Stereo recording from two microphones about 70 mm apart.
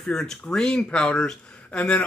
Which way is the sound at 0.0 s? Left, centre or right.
Centre.